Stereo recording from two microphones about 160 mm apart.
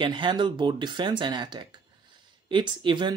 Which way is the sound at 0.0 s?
30° right (ahead or behind).